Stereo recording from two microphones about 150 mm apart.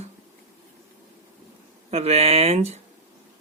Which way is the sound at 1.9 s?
45° right (ahead or behind).